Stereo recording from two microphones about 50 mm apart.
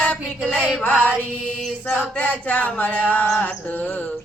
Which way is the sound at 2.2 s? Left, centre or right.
Left.